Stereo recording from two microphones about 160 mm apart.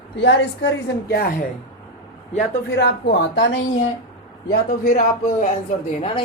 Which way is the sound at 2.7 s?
90° left.